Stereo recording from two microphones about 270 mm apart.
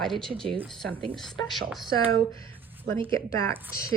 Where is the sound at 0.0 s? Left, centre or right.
Centre.